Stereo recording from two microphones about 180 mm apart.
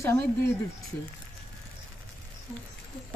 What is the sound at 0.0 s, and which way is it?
Speech, 15° left (ahead or behind).